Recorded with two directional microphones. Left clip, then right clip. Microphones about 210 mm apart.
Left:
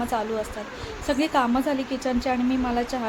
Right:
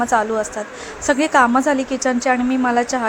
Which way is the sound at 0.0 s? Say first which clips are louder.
Right 9 dB; 15° right (ahead or behind).